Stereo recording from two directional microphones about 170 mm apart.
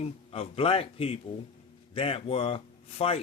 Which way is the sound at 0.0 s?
35° left (ahead or behind).